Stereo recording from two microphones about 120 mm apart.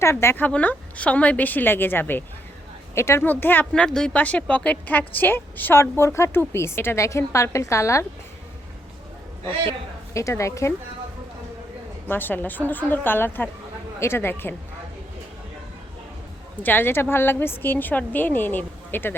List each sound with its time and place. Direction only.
0.0 s a woman's voice: 20° left (ahead or behind)
10.2 s speech: 25° left (ahead or behind)
12.0 s a woman's voice: 15° left (ahead or behind)
16.6 s a woman's voice: 15° left (ahead or behind)